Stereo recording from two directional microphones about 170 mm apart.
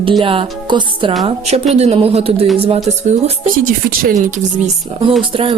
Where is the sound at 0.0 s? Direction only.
30° right (ahead or behind).